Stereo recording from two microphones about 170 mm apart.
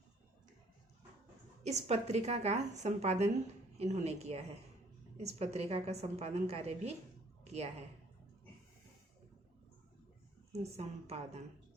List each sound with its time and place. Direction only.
1.6 s a woman's voice: 40° right (ahead or behind)
10.5 s a woman's voice: 40° right (ahead or behind)